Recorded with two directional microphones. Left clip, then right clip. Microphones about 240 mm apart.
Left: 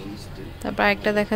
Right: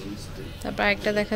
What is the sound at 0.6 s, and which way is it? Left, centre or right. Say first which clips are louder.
Speech: left 3 dB; centre.